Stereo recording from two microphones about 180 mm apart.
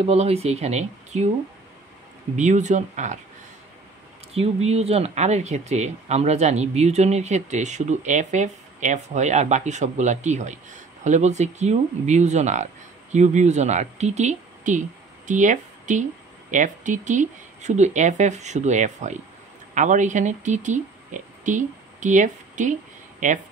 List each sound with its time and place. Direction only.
0.0 s speech: 35° right (ahead or behind)
2.3 s speech: 40° right (ahead or behind)
4.3 s speech: 35° right (ahead or behind)